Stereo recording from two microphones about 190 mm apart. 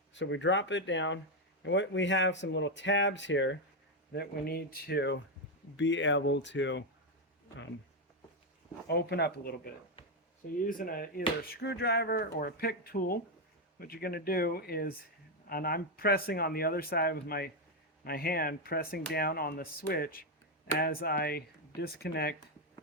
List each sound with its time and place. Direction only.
0.1 s speech: 70° left (ahead or behind)
4.1 s speech: 55° left (ahead or behind)
5.7 s speech: 75° left (ahead or behind)
8.9 s speech: 60° left (ahead or behind)
10.7 s speech: 50° left (ahead or behind)